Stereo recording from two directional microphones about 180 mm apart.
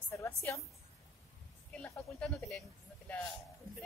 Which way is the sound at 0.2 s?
15° left (ahead or behind).